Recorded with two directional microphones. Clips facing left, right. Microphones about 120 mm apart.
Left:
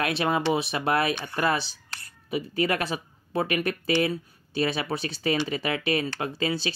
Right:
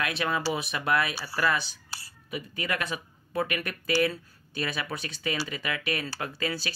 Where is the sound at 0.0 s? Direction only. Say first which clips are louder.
Left 4 dB; 30° left (ahead or behind).